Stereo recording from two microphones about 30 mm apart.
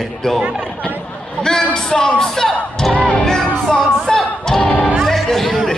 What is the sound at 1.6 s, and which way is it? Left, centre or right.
Speech, left.